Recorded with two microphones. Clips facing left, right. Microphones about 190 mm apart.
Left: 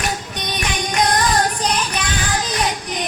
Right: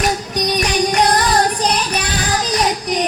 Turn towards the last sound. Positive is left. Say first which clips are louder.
# right 5 dB
turn(degrees=-35)  # may be behind; listen again after turning